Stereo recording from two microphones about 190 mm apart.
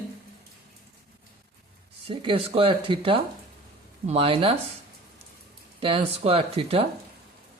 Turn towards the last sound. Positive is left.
turn(degrees=-30)  # may be behind; listen again after turning